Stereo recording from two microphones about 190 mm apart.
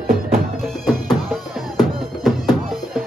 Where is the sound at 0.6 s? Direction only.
Centre (ahead or behind).